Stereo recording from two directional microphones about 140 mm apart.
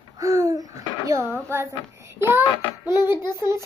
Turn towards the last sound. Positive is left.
turn(degrees=-20)  # may be behind; listen again after turning